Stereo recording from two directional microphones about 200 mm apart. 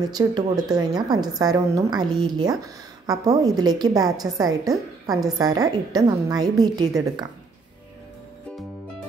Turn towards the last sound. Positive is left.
turn(degrees=-20)  # may be behind; listen again after turning